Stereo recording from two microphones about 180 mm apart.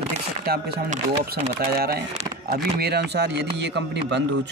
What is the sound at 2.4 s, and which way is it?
Speech, 60° right (ahead or behind).